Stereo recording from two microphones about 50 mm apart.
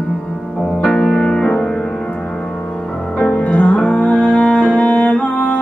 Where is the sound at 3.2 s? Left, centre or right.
Left.